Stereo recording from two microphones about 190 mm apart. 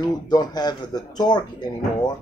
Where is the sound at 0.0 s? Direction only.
20° left (ahead or behind).